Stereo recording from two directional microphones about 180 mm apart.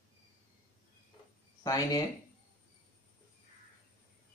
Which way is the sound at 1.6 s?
20° left (ahead or behind).